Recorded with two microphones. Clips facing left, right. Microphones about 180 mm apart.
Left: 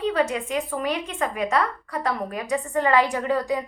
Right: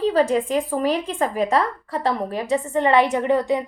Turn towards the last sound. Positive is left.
turn(degrees=-20)  # may be behind; listen again after turning